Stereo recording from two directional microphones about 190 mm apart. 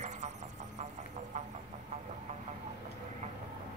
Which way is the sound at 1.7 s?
40° right (ahead or behind).